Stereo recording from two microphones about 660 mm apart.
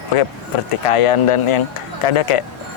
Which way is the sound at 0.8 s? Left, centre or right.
Left.